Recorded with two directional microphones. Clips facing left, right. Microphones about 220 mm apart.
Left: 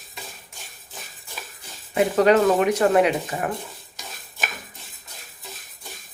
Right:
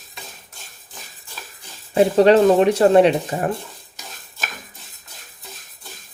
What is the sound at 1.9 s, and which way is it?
Speech, 30° right (ahead or behind).